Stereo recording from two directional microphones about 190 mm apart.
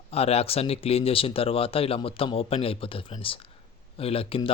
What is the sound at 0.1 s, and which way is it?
Speech, 30° left (ahead or behind).